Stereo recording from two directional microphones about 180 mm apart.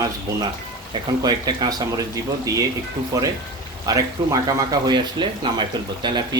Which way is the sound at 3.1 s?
20° right (ahead or behind).